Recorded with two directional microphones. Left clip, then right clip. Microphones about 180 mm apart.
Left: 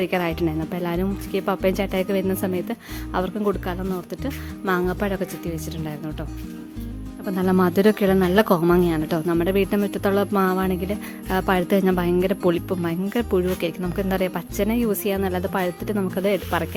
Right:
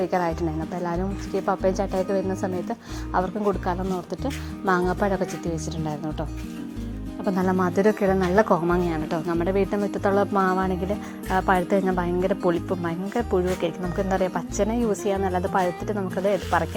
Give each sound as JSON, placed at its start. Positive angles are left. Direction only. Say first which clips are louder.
{"t": 0.1, "sound": "speech", "louder": "left 1 dB", "side_deg": 45}
{"t": 3.7, "sound": "speech", "louder": "right 1 dB", "side_deg": 15}
{"t": 7.5, "sound": "speech", "louder": "left 4 dB", "side_deg": 40}